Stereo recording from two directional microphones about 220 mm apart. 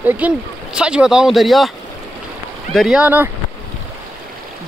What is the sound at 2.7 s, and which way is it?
Speech, centre (ahead or behind).